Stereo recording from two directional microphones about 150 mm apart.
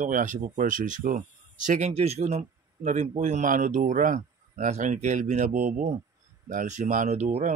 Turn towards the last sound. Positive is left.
turn(degrees=-50)  # may be behind; listen again after turning